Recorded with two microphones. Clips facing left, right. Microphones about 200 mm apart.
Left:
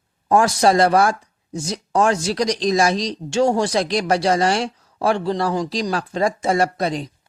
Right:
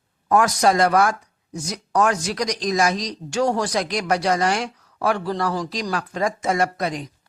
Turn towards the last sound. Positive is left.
turn(degrees=30)  # may be behind; listen again after turning